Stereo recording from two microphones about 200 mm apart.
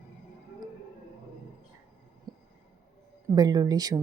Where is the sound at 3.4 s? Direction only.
20° right (ahead or behind).